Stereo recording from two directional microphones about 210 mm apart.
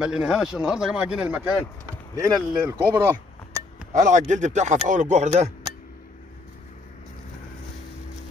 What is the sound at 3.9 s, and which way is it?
Speech, 35° right (ahead or behind).